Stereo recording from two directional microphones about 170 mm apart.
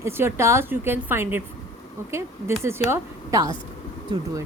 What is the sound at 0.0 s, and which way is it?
A woman's voice, 15° right (ahead or behind).